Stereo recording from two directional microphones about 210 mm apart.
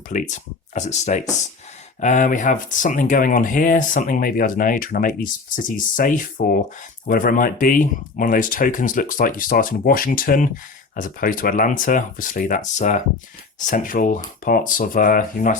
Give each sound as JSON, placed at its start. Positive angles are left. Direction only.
{"t": 0.1, "sound": "speech", "side_deg": 35}